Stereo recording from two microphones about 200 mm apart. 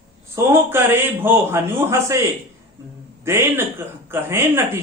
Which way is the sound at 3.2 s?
15° right (ahead or behind).